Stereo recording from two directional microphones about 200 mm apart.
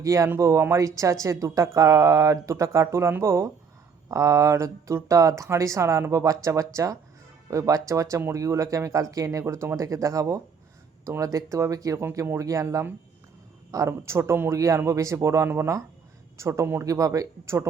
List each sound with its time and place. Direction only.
0.0 s speech: 15° right (ahead or behind)